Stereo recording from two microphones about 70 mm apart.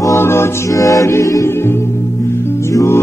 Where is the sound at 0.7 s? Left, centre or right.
Left.